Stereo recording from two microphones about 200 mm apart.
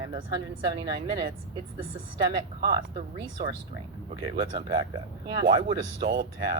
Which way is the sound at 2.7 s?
25° right (ahead or behind).